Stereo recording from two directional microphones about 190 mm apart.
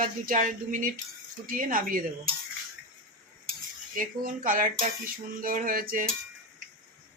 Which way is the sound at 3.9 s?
45° right (ahead or behind).